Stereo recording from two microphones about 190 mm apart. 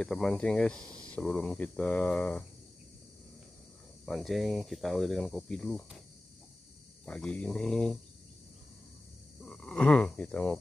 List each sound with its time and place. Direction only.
0.0 s speech: 5° left (ahead or behind)
0.8 s speech: 20° right (ahead or behind)
1.1 s speech: 5° left (ahead or behind)
4.0 s speech: centre (ahead or behind)
7.1 s speech: 5° left (ahead or behind)
9.4 s speech: 5° left (ahead or behind)